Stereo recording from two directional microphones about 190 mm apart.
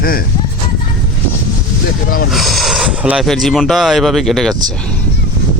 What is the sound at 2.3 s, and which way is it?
Speech, centre (ahead or behind).